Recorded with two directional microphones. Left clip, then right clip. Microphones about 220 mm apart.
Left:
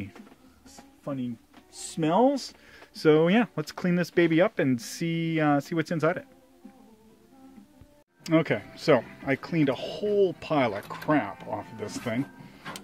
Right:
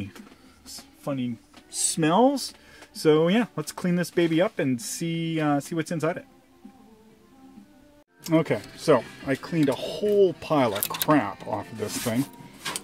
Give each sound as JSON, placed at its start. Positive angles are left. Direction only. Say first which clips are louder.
{"t": 1.0, "sound": "speech", "louder": "right 4 dB", "side_deg": -35}
{"t": 2.0, "sound": "speech", "louder": "right 2 dB", "side_deg": -25}
{"t": 8.2, "sound": "speech", "louder": "right 1 dB", "side_deg": -10}